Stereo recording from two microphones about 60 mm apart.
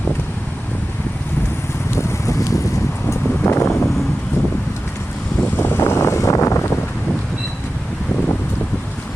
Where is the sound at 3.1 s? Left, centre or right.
Left.